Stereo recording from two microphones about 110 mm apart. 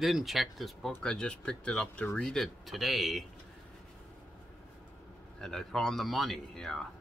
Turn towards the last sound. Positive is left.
turn(degrees=5)  # may be behind; listen again after turning